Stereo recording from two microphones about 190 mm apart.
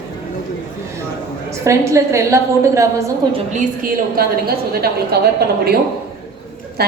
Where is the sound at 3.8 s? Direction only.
50° right (ahead or behind).